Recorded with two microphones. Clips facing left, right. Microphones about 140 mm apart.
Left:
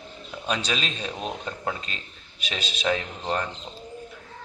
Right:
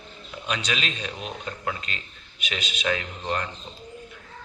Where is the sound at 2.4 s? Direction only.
35° left (ahead or behind).